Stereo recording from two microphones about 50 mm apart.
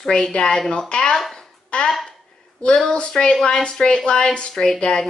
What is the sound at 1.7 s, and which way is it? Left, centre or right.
Speech, left.